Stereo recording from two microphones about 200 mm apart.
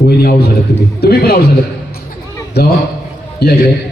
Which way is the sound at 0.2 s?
50° left (ahead or behind).